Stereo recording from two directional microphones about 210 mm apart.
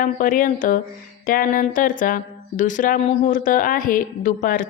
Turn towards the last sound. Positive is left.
turn(degrees=40)  # may be behind; listen again after turning